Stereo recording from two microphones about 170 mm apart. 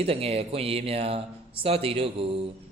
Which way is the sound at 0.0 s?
35° right (ahead or behind).